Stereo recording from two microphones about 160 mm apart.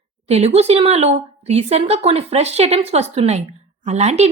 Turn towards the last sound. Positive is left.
turn(degrees=-45)  # may be behind; listen again after turning